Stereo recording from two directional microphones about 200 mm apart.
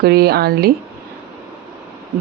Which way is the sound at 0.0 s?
50° right (ahead or behind).